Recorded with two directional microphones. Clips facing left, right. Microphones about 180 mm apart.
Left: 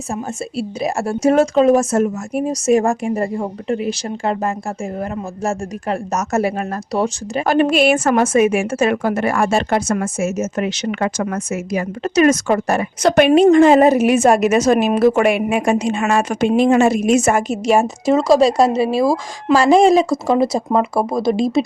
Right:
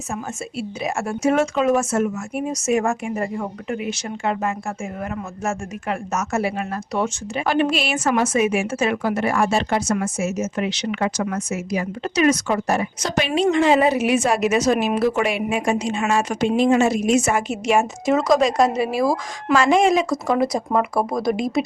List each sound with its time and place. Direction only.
0.1 s speech: 35° left (ahead or behind)